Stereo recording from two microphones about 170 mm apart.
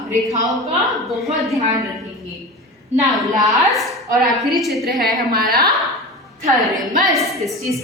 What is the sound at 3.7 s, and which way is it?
A woman's voice, centre (ahead or behind).